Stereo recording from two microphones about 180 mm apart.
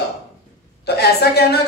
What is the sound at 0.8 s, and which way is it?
Speech, 65° left (ahead or behind).